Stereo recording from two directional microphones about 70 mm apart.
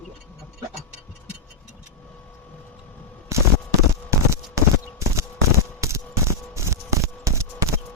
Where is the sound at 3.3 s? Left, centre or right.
Right.